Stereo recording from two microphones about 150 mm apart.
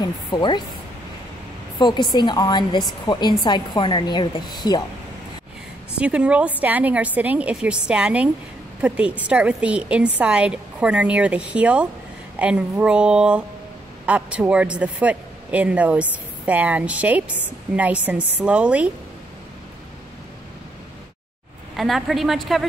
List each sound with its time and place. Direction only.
0.0 s speech: 30° left (ahead or behind)
1.8 s a woman's voice: 30° left (ahead or behind)
5.9 s a man's voice: 10° right (ahead or behind)
21.7 s a woman's voice: centre (ahead or behind)